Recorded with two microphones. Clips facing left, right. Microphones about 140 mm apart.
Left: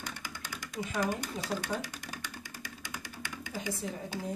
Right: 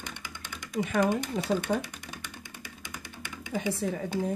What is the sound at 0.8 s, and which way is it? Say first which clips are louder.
Speech: right 7 dB; 60° right (ahead or behind).